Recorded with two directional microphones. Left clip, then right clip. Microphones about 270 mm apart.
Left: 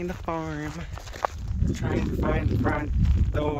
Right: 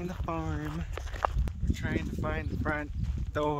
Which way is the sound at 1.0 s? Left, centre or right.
Left.